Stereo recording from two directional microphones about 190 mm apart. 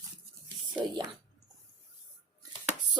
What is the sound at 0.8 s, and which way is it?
Speech, 25° right (ahead or behind).